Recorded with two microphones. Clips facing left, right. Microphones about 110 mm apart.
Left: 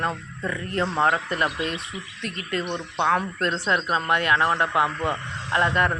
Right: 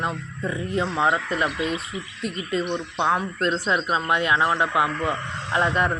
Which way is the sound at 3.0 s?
15° right (ahead or behind).